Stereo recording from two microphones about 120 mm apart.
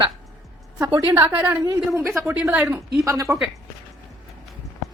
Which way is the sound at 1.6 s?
25° right (ahead or behind).